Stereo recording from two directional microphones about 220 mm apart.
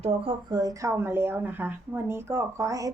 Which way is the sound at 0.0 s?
25° right (ahead or behind).